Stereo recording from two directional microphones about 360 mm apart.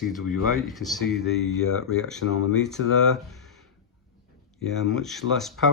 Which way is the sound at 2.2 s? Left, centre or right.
Left.